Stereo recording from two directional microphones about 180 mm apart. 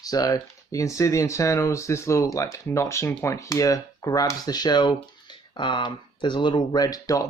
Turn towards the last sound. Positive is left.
turn(degrees=20)  # may be behind; listen again after turning